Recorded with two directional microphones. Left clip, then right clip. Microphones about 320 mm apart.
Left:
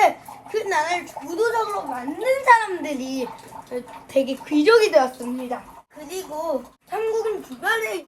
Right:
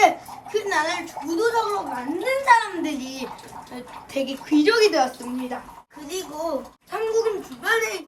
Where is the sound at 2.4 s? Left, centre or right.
Centre.